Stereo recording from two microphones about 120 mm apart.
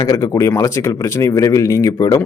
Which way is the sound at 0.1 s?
25° left (ahead or behind).